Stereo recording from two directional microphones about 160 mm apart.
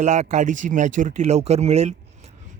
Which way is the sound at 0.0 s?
45° right (ahead or behind).